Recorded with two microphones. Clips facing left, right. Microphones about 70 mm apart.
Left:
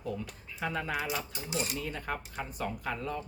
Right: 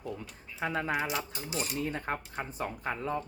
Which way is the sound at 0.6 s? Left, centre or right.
Right.